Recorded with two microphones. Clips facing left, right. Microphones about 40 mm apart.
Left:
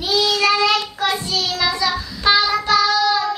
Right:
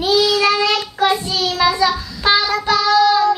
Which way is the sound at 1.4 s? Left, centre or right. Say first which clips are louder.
Right 6 dB; right.